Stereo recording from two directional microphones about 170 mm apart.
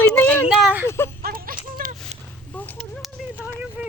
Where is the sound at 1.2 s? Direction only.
60° right (ahead or behind).